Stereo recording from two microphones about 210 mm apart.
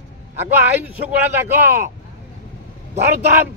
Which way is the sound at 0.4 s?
10° right (ahead or behind).